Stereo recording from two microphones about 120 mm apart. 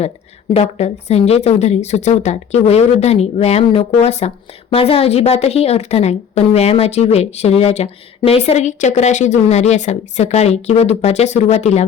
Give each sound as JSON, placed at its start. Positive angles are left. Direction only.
{"t": 0.5, "sound": "a woman's voice", "side_deg": 65}